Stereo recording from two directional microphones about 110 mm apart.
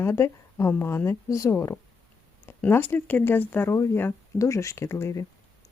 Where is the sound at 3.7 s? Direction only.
30° left (ahead or behind).